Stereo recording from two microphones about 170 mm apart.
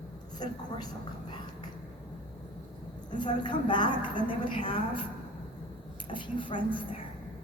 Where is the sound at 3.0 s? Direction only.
25° left (ahead or behind).